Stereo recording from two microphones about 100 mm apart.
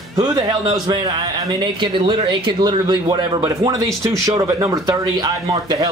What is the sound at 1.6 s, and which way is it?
Speech, 50° right (ahead or behind).